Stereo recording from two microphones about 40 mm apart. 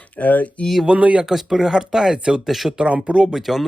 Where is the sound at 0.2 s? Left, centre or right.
Left.